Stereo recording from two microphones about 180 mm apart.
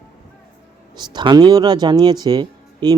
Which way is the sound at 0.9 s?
25° right (ahead or behind).